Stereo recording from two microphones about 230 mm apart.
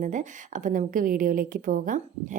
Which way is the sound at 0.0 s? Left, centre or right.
Right.